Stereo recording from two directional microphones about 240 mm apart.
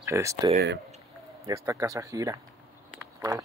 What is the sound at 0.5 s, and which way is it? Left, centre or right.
Speech, right.